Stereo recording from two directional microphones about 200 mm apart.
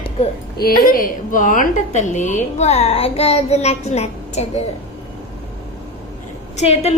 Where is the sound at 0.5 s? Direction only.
50° left (ahead or behind); by 4.6 s 35° left (ahead or behind).